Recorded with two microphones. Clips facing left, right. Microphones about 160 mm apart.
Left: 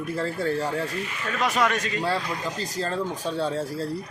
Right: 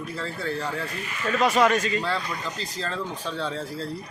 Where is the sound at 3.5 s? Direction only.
40° left (ahead or behind).